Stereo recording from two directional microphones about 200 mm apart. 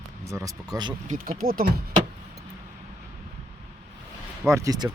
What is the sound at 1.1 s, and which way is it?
Speech, 45° right (ahead or behind).